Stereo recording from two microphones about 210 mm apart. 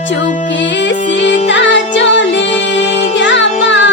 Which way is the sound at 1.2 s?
60° left (ahead or behind).